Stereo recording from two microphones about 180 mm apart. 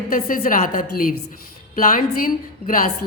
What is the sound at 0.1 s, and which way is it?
A woman's voice, 50° left (ahead or behind).